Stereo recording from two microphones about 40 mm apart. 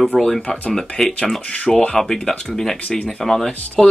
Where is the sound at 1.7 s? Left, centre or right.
Centre.